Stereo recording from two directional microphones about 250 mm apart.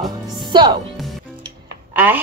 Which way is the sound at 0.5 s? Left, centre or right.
Centre.